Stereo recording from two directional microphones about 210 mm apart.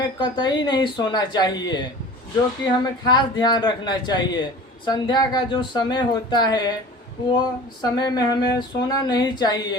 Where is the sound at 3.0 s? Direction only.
20° left (ahead or behind).